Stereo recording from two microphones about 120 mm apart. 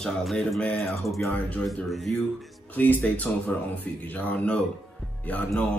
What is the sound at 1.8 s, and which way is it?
Speech, centre (ahead or behind).